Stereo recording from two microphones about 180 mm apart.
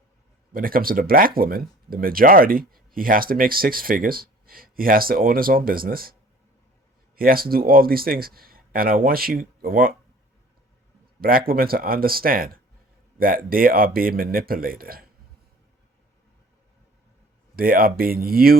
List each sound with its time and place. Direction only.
0.5 s speech: 50° right (ahead or behind)
7.2 s speech: 55° right (ahead or behind)
11.2 s speech: 55° right (ahead or behind)
17.6 s speech: 55° right (ahead or behind)